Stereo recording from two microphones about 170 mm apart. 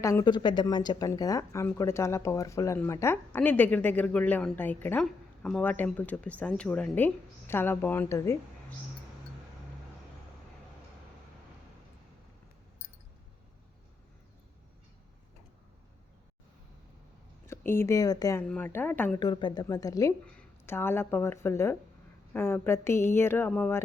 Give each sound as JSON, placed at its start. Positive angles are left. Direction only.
{"t": 0.0, "sound": "speech", "side_deg": 15}
{"t": 17.4, "sound": "speech", "side_deg": 15}
{"t": 18.4, "sound": "speech", "side_deg": 10}
{"t": 19.2, "sound": "speech", "side_deg": 25}